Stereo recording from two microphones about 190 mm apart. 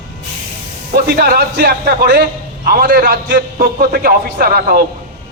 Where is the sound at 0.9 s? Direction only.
55° right (ahead or behind).